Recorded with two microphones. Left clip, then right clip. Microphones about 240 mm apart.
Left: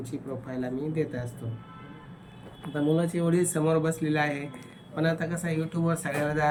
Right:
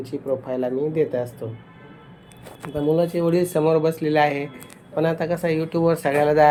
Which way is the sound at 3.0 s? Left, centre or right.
Right.